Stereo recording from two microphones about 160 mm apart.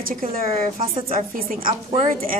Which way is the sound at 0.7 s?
40° right (ahead or behind).